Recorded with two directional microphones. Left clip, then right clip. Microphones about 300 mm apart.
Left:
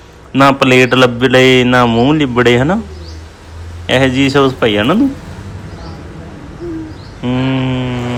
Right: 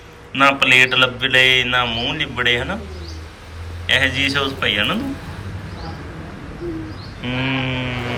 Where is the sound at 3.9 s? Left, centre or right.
Centre.